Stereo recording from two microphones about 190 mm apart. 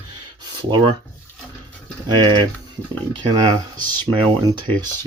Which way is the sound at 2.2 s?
25° right (ahead or behind).